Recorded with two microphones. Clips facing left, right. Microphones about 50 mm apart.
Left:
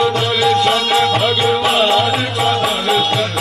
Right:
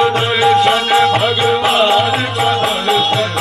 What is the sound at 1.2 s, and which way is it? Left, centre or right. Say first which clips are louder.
Music: right 1 dB; centre.